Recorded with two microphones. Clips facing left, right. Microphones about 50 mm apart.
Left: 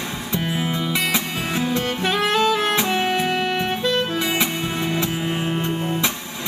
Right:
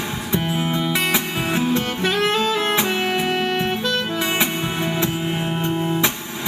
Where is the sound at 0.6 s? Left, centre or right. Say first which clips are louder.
Right 2 dB; centre.